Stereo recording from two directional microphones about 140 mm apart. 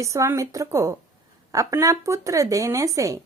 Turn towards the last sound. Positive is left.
turn(degrees=-25)  # may be behind; listen again after turning